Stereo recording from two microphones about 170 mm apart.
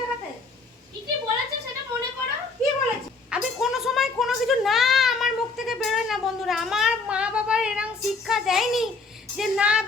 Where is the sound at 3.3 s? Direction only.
Centre (ahead or behind).